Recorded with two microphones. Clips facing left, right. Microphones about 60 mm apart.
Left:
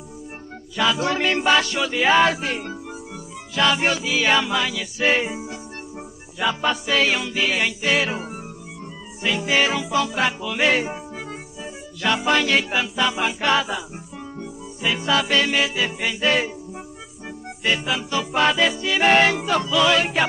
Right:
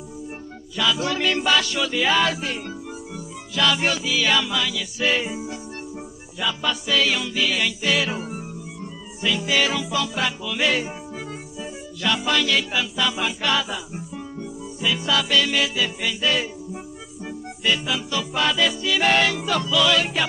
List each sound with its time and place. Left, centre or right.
0.7 s music: left